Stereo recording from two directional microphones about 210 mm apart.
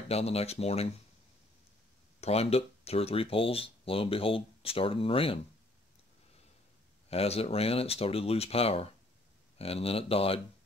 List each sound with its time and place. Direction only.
0.1 s speech: 30° left (ahead or behind)
2.1 s speech: 30° left (ahead or behind)
7.1 s speech: 30° left (ahead or behind)